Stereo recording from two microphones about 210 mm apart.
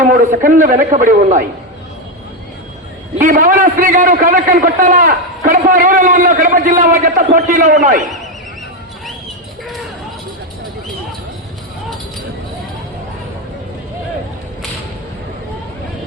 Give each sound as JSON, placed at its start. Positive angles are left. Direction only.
{"t": 0.2, "sound": "a man's voice", "side_deg": -40}
{"t": 3.2, "sound": "a man's voice", "side_deg": -40}